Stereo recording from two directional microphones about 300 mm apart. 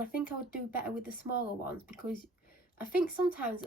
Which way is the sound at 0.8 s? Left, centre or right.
Left.